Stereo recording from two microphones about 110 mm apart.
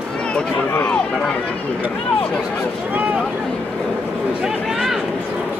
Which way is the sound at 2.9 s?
15° right (ahead or behind).